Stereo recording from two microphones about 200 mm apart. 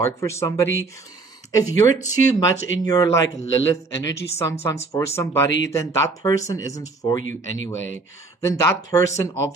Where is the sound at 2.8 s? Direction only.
20° left (ahead or behind).